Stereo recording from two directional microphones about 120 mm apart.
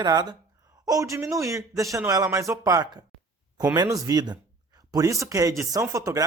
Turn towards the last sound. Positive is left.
turn(degrees=-30)  # may be behind; listen again after turning